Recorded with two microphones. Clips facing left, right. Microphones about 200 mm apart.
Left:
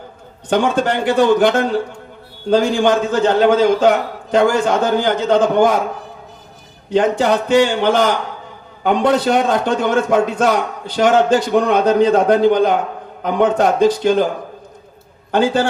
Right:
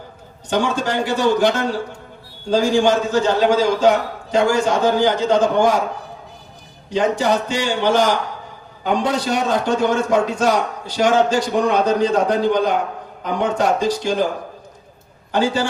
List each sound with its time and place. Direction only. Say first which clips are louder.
0.5 s a man's voice: left 4 dB; 55° left (ahead or behind)
6.9 s a man's voice: left 3 dB; 55° left (ahead or behind)
15.3 s a man's voice: left 4 dB; 55° left (ahead or behind)